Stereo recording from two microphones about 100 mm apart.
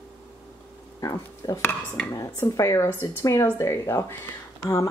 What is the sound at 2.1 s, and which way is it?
Speech, 35° left (ahead or behind).